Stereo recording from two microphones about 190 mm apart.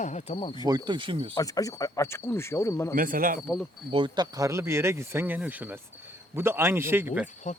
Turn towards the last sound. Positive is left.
turn(degrees=40)  # may be behind; listen again after turning